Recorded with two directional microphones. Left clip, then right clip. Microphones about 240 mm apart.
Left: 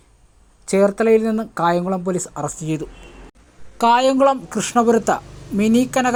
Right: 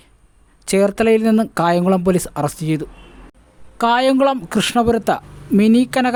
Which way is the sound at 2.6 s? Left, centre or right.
Right.